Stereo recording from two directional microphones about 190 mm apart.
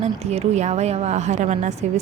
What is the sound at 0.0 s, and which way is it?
A woman's voice, 35° right (ahead or behind).